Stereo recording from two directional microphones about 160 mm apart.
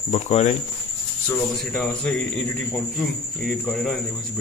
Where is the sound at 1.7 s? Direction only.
5° left (ahead or behind).